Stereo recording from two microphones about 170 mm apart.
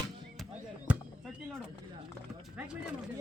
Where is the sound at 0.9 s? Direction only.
10° right (ahead or behind).